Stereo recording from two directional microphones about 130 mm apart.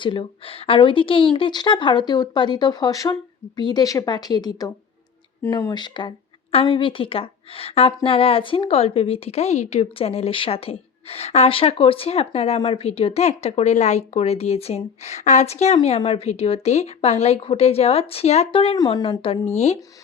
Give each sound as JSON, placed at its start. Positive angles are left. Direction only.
{"t": 0.0, "sound": "a woman's voice", "side_deg": 40}